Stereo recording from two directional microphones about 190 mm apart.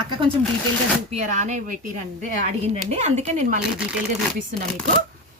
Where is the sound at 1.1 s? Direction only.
35° right (ahead or behind).